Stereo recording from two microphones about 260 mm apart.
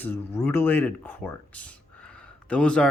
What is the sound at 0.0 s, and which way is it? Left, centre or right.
Speech, centre.